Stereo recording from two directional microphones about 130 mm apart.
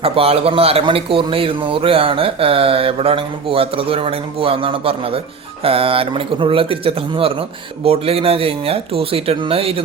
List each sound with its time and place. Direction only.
0.0 s speech: 45° right (ahead or behind)